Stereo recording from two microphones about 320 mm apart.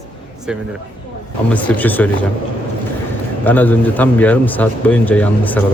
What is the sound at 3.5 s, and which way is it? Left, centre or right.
A man's voice, centre.